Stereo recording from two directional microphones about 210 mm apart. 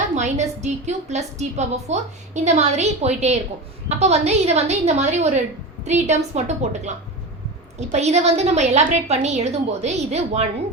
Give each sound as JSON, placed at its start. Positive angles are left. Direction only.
{"t": 0.2, "sound": "a woman's voice", "side_deg": -35}